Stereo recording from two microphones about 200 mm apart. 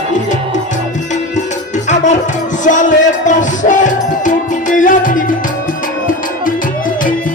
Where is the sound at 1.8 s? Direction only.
35° left (ahead or behind).